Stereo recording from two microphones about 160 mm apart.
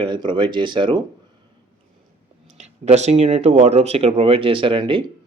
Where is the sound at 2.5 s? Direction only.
45° right (ahead or behind).